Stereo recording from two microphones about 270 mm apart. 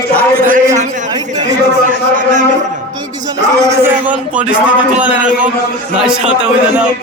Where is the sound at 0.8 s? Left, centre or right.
Right.